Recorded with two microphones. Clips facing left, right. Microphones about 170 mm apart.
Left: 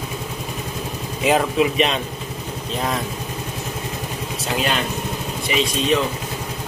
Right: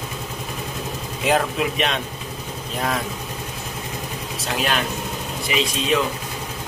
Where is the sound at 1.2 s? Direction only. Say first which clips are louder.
Left 3 dB; centre (ahead or behind).